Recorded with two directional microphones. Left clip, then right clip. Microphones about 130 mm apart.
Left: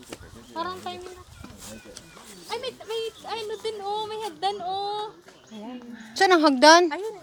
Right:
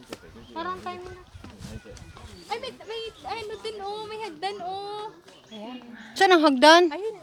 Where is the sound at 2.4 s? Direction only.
5° left (ahead or behind).